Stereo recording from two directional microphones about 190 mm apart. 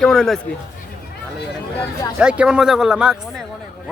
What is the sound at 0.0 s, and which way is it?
Speech, 5° left (ahead or behind).